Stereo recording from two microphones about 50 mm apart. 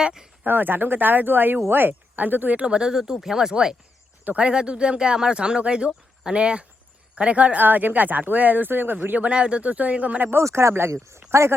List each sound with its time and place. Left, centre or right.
0.0 s speech: centre
0.4 s speech: right
2.6 s speech: centre
2.9 s speech: centre; by 10.3 s right
10.4 s speech: right